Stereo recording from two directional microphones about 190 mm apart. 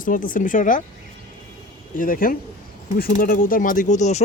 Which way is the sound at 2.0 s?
45° left (ahead or behind).